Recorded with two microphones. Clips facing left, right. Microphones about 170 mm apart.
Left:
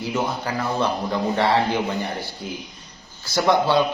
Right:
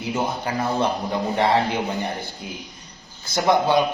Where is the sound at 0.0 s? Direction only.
20° right (ahead or behind).